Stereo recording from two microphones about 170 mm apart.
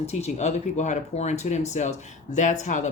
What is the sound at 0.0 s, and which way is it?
Speech, 40° left (ahead or behind).